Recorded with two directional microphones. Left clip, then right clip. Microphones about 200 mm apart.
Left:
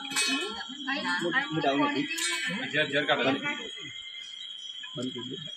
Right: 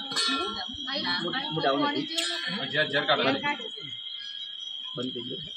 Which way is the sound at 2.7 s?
20° right (ahead or behind).